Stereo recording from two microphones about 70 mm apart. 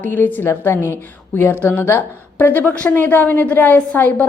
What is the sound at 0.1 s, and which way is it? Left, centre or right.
A woman's voice, left.